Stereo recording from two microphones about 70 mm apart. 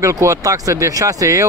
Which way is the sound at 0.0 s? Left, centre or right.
Right.